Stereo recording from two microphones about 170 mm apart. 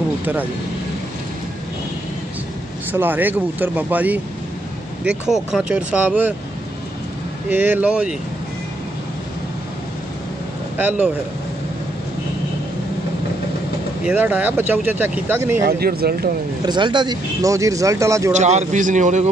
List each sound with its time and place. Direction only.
2.9 s speech: 10° right (ahead or behind)
5.3 s speech: 5° right (ahead or behind)
7.4 s speech: 10° right (ahead or behind)
10.8 s speech: 10° right (ahead or behind)
14.0 s speech: 10° right (ahead or behind)
15.6 s speech: 65° right (ahead or behind)
16.6 s speech: 25° right (ahead or behind)
18.3 s a man's voice: 40° right (ahead or behind)